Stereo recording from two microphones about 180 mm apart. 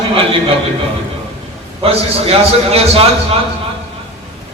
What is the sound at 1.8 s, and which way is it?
A man's voice, 35° right (ahead or behind).